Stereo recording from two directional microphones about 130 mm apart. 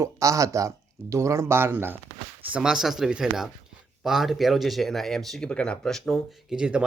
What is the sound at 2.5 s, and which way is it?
Speech, 5° right (ahead or behind).